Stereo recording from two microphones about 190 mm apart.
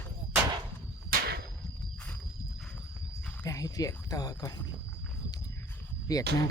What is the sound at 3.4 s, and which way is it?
Speech, 20° left (ahead or behind).